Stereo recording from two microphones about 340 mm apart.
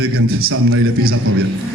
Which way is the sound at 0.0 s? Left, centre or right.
Right.